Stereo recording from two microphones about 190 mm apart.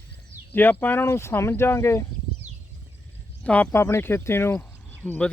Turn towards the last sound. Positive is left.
turn(degrees=5)  # may be behind; listen again after turning